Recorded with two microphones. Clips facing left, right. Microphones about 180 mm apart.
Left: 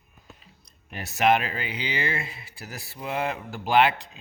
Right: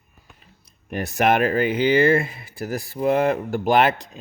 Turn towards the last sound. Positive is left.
turn(degrees=-45)  # may be behind; listen again after turning